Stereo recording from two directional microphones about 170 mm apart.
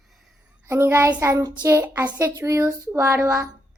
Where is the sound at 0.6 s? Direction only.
15° right (ahead or behind).